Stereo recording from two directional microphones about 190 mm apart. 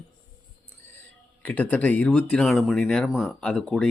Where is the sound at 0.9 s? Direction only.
10° left (ahead or behind).